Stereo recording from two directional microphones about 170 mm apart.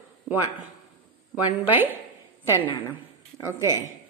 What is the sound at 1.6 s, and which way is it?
Speech, 10° right (ahead or behind).